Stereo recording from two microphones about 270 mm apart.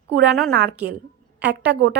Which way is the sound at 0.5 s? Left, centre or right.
Right.